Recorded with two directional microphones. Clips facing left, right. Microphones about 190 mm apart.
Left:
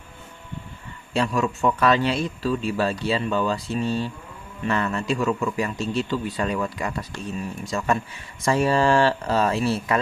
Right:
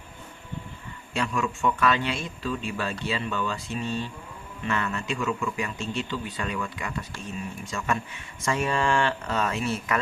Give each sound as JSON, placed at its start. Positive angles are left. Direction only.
{"t": 1.1, "sound": "speech", "side_deg": 35}